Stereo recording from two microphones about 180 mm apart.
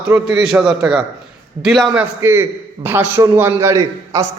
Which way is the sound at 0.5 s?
5° right (ahead or behind).